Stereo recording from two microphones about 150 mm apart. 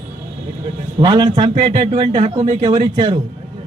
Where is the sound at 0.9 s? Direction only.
30° right (ahead or behind).